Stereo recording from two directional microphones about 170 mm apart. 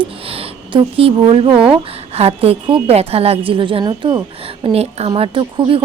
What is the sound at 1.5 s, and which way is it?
Speech, 5° right (ahead or behind).